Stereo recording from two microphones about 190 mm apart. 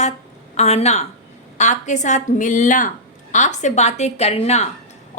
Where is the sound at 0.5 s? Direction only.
35° left (ahead or behind).